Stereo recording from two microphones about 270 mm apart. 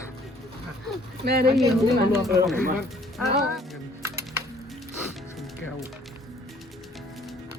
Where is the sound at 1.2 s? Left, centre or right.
Right.